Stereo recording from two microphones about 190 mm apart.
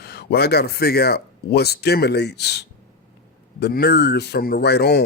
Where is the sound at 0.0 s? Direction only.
60° left (ahead or behind).